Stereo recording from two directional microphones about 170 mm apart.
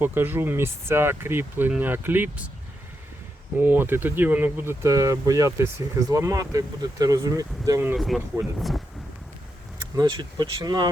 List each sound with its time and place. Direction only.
0.0 s speech: 10° right (ahead or behind)
3.6 s speech: 10° right (ahead or behind)
7.9 s speech: centre (ahead or behind)
9.9 s speech: 25° right (ahead or behind)